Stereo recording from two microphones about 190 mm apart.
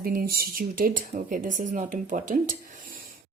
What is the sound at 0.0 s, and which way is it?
Speech, 50° right (ahead or behind).